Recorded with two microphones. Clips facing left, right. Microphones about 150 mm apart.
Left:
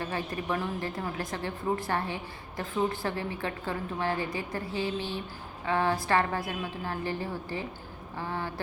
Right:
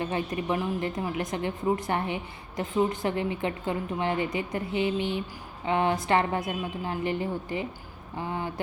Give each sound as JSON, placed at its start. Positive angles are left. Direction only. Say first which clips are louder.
{"t": 0.0, "sound": "a woman's voice", "louder": "right 4 dB", "side_deg": -20}